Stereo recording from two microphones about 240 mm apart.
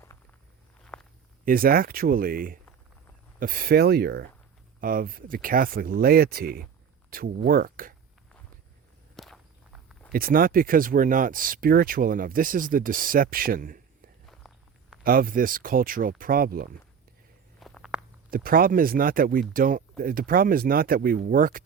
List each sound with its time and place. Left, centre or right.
0.9 s a sound: centre
1.5 s speech: right
9.1 s walk: centre
10.1 s speech: right
14.3 s walk: centre
15.0 s speech: right
17.6 s walk: centre
18.3 s speech: right